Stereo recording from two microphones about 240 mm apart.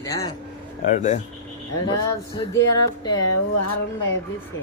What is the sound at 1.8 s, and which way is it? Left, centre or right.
Music, centre.